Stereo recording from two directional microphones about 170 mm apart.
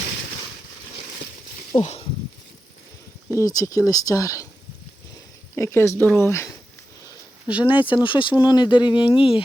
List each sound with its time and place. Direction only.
1.8 s speech: 40° left (ahead or behind)
3.2 s speech: 20° left (ahead or behind)
5.5 s speech: 15° left (ahead or behind)
7.4 s speech: 10° right (ahead or behind)
7.7 s speech: 30° left (ahead or behind)